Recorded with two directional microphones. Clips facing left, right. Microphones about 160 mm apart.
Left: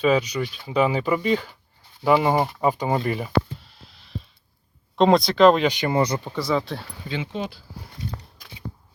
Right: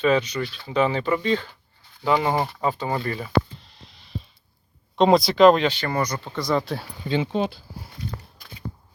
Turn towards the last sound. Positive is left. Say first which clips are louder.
# right 6 dB
turn(degrees=-25)  # may be behind; listen again after turning